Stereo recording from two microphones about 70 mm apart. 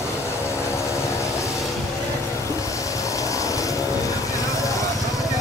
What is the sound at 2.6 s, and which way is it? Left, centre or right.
Vehicle, left.